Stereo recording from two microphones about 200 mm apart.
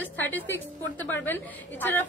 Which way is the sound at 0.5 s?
10° left (ahead or behind).